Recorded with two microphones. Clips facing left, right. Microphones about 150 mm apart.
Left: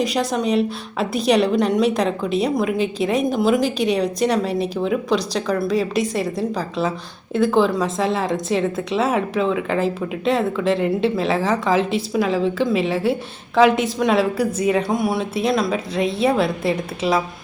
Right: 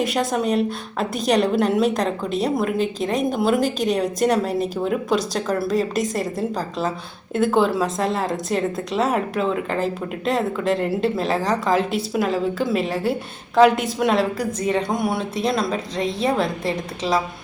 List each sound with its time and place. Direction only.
0.0 s a woman's voice: centre (ahead or behind)
16.0 s a woman's voice: 35° right (ahead or behind)
17.0 s speech: 10° left (ahead or behind)